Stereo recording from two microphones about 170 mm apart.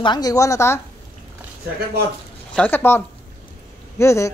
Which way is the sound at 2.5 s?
10° left (ahead or behind).